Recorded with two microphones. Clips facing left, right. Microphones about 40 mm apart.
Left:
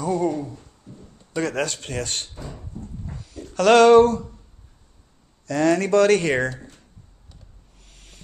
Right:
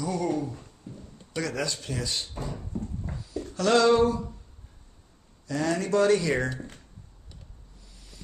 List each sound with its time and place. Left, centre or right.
0.0 s speech: left
3.4 s speech: left
5.5 s speech: left
7.9 s vehicle: left